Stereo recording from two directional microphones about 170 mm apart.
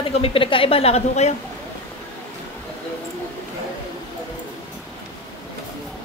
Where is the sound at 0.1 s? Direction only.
35° left (ahead or behind).